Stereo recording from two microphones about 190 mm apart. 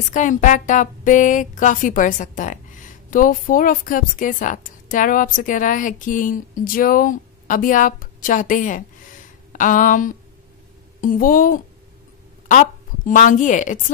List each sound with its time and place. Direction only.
0.1 s a woman's voice: 40° left (ahead or behind)